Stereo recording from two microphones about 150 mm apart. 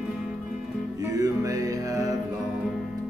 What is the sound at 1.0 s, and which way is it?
Music, 20° right (ahead or behind).